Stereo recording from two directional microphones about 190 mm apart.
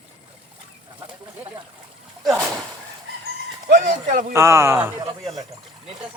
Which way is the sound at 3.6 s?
40° right (ahead or behind).